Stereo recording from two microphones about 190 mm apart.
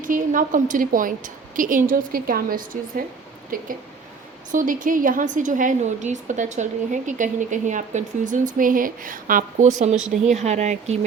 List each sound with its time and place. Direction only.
0.0 s a woman's voice: 45° right (ahead or behind)